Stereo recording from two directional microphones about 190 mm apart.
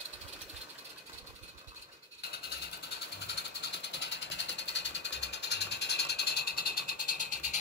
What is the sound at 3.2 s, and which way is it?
Sewing machine, 65° left (ahead or behind).